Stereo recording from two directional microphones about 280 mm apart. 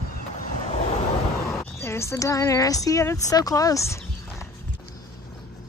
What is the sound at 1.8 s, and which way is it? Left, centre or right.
Speech, centre.